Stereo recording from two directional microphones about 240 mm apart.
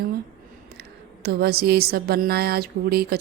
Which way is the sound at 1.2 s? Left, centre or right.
Right.